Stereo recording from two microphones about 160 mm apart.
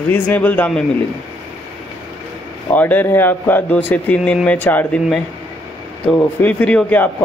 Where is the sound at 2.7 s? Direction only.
10° left (ahead or behind).